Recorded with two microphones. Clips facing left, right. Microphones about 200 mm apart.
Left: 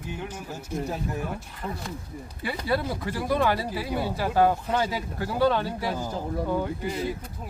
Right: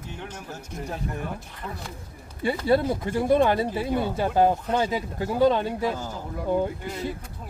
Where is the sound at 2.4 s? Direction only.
25° right (ahead or behind).